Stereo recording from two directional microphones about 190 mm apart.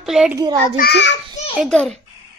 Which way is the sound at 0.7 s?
60° left (ahead or behind).